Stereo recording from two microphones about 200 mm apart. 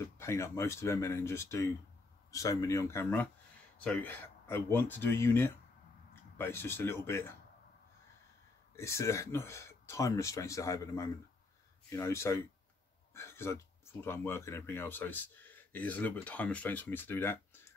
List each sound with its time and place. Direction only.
0.2 s speech: 15° left (ahead or behind)
8.7 s speech: 15° left (ahead or behind)
13.1 s a sound: 15° left (ahead or behind)
14.0 s speech: 10° left (ahead or behind)